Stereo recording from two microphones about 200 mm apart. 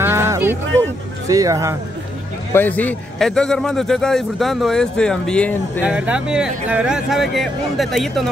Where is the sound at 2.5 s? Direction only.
10° left (ahead or behind).